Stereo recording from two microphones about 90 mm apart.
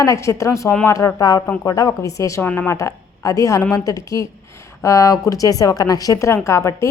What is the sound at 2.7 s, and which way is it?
A woman's voice, 40° left (ahead or behind).